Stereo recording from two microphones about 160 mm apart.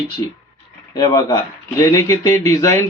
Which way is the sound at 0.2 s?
25° left (ahead or behind).